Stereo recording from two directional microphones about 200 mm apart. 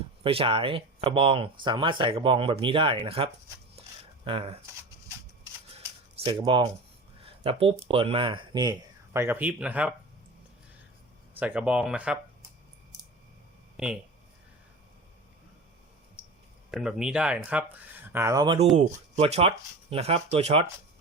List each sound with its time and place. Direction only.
0.2 s speech: 25° right (ahead or behind)
3.8 s a sound: 30° right (ahead or behind)
4.3 s speech: 30° right (ahead or behind)
6.2 s speech: 20° right (ahead or behind)
9.1 s speech: 10° right (ahead or behind)
11.3 s speech: 5° right (ahead or behind)
13.7 s speech: 5° right (ahead or behind)
16.7 s speech: 5° right (ahead or behind)
18.8 s speech: 30° right (ahead or behind)